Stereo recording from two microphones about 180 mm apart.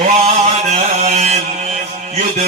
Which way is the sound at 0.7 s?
35° right (ahead or behind).